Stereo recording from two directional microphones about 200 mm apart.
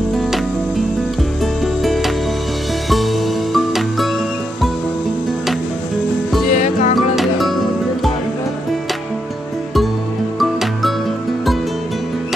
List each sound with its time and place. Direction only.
1.4 s music: centre (ahead or behind)
6.5 s music: 40° left (ahead or behind)
7.0 s music: centre (ahead or behind)
10.4 s music: centre (ahead or behind)